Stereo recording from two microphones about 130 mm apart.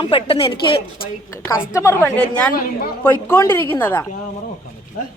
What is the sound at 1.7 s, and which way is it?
Speech, 20° left (ahead or behind).